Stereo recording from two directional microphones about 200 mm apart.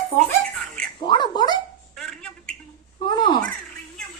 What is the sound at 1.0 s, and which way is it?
Dog, 25° left (ahead or behind).